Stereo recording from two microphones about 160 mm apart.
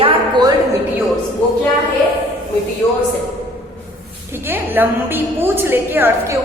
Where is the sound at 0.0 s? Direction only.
25° right (ahead or behind).